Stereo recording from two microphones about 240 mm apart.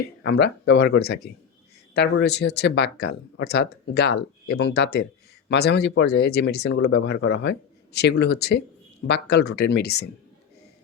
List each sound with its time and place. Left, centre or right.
0.2 s speech: left